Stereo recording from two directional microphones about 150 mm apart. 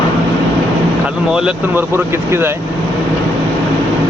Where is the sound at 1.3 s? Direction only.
10° right (ahead or behind).